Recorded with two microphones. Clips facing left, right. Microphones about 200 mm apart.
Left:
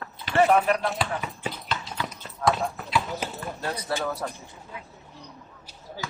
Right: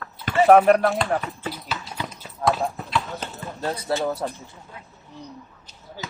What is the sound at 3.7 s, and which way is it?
Speech, 25° right (ahead or behind).